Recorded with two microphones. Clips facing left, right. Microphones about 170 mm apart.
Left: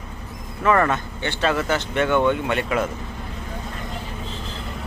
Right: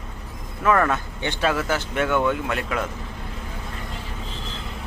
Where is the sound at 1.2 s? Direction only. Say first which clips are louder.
Even; 15° right (ahead or behind).